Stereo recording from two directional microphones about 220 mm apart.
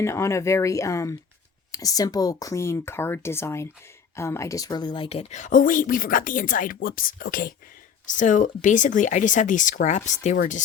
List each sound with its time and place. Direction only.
0.0 s a woman's voice: 10° left (ahead or behind); by 10.6 s 35° left (ahead or behind)